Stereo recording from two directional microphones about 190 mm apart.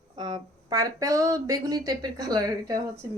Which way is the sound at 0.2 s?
25° right (ahead or behind).